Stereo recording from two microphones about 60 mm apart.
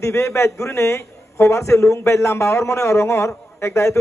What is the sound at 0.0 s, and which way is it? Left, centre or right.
A man's voice, left.